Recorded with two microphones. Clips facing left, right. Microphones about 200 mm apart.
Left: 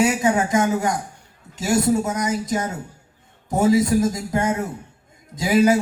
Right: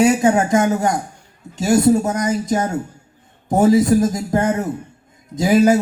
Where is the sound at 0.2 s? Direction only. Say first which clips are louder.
Right 4 dB; 50° right (ahead or behind).